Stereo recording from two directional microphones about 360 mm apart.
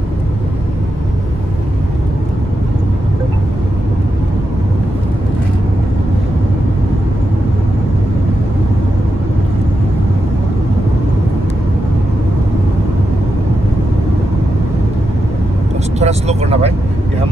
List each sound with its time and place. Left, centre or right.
16.0 s vehicle: centre